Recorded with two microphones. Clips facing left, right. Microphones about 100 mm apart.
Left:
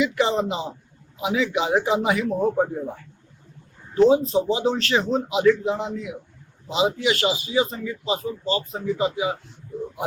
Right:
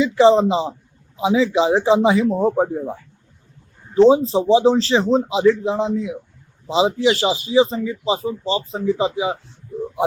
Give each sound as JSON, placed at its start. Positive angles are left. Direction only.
{"t": 0.0, "sound": "speech", "side_deg": -30}
{"t": 3.9, "sound": "speech", "side_deg": -30}